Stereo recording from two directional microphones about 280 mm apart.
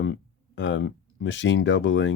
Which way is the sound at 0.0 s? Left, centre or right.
Left.